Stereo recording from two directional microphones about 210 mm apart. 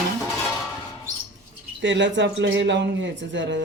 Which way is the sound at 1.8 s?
60° right (ahead or behind).